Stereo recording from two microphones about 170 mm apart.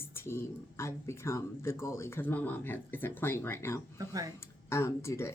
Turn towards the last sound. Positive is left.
turn(degrees=15)  # may be behind; listen again after turning